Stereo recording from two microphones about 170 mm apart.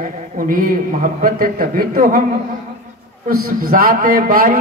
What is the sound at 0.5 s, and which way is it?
A man's voice, 55° right (ahead or behind).